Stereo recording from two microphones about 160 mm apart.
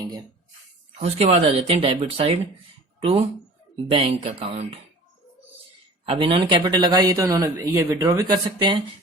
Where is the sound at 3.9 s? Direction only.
35° right (ahead or behind).